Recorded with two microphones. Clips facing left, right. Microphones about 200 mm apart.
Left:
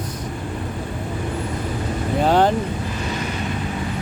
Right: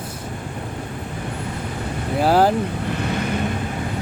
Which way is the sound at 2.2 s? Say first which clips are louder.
Right 1 dB; 5° right (ahead or behind).